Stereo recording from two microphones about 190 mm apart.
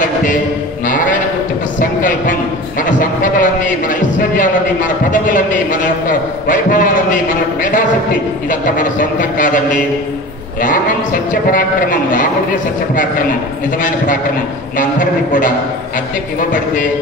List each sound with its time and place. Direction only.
0.0 s mantra: 45° left (ahead or behind)
0.8 s sheep: 45° left (ahead or behind)
1.8 s a sound: 45° left (ahead or behind)
4.4 s a man's voice: 45° left (ahead or behind)
8.5 s a man's voice: 45° left (ahead or behind)
11.5 s a man's voice: 45° left (ahead or behind)
14.8 s a man's voice: 45° left (ahead or behind)